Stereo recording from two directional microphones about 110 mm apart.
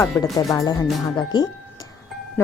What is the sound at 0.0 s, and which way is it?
Speech, 30° left (ahead or behind).